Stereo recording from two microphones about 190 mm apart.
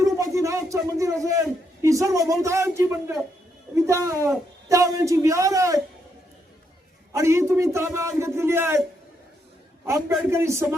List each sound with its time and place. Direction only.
0.0 s a sound: 15° right (ahead or behind)
1.8 s a man's voice: 15° right (ahead or behind)
7.1 s a man's voice: 15° right (ahead or behind)
10.2 s a man's voice: 15° right (ahead or behind)